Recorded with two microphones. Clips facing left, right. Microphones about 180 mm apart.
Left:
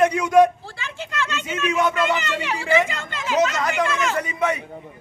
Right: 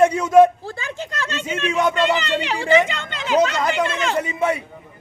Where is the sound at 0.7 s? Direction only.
35° right (ahead or behind).